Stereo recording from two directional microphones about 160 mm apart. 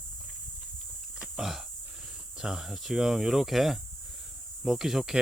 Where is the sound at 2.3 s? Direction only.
5° right (ahead or behind).